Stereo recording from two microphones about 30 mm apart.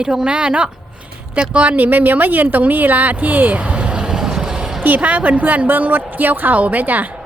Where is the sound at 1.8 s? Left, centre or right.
Right.